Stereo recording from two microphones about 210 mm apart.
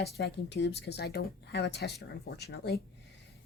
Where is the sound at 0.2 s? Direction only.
55° left (ahead or behind).